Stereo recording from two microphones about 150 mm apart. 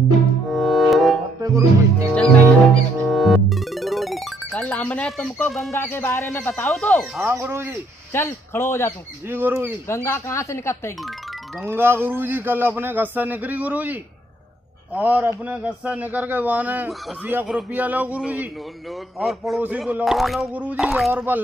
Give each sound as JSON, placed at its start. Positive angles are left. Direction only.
{"t": 0.5, "sound": "music", "side_deg": 0}
{"t": 1.4, "sound": "speech", "side_deg": -20}
{"t": 2.0, "sound": "music", "side_deg": 5}
{"t": 5.7, "sound": "speech", "side_deg": 15}
{"t": 7.2, "sound": "a man's voice", "side_deg": -15}
{"t": 8.1, "sound": "speech", "side_deg": 15}
{"t": 9.3, "sound": "a man's voice", "side_deg": -15}
{"t": 9.8, "sound": "speech", "side_deg": 15}
{"t": 11.6, "sound": "a man's voice", "side_deg": -15}
{"t": 15.0, "sound": "a man's voice", "side_deg": -10}
{"t": 21.1, "sound": "a man's voice", "side_deg": -15}